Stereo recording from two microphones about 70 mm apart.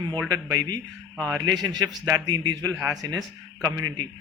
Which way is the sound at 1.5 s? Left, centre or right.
Right.